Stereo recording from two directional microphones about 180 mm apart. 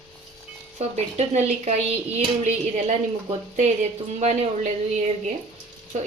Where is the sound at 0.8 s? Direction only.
35° right (ahead or behind).